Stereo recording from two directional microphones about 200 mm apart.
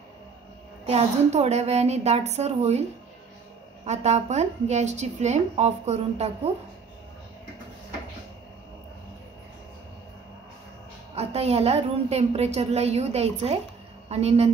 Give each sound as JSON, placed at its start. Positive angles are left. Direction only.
{"t": 0.8, "sound": "a woman's voice", "side_deg": -30}
{"t": 3.8, "sound": "a woman's voice", "side_deg": -35}
{"t": 11.1, "sound": "a woman's voice", "side_deg": -30}